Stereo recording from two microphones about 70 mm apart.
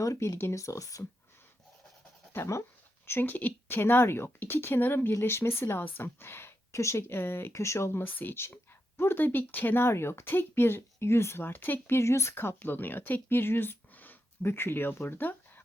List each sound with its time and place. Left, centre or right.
0.0 s speech: left
2.3 s speech: left
3.1 s speech: left
8.0 s speech: left